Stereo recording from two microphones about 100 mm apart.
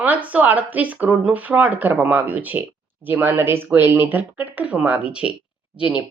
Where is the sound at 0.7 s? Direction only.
15° right (ahead or behind).